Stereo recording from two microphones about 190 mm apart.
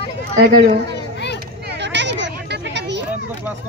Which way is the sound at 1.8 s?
65° right (ahead or behind).